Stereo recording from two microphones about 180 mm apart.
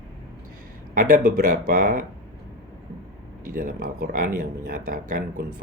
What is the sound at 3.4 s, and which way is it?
Speech, 50° right (ahead or behind).